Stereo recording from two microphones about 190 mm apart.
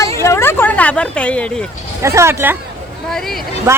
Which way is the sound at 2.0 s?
15° right (ahead or behind).